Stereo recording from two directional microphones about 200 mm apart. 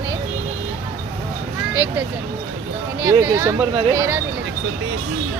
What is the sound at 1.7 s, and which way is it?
Vehicle, 10° right (ahead or behind).